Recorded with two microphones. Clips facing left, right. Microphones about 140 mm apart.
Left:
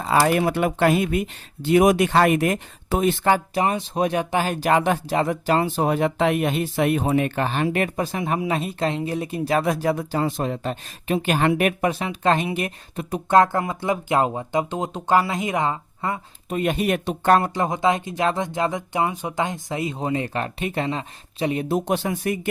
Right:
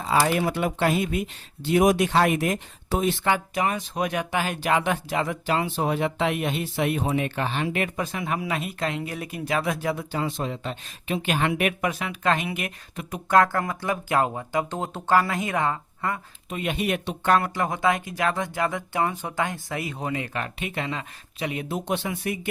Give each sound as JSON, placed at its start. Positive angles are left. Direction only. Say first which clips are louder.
{"t": 0.0, "sound": "speech", "louder": "left 3 dB", "side_deg": 55}
{"t": 16.5, "sound": "speech", "louder": "left 5 dB", "side_deg": 45}
{"t": 17.4, "sound": "speech", "louder": "left 3 dB", "side_deg": 25}